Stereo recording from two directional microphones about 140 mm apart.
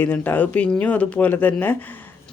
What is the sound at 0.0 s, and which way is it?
Speech, 10° left (ahead or behind).